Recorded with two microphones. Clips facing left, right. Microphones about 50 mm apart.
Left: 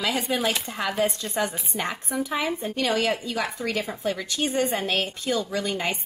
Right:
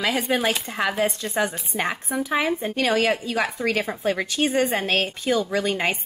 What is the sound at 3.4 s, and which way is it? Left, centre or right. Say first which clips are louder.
Speech: right 4 dB; centre.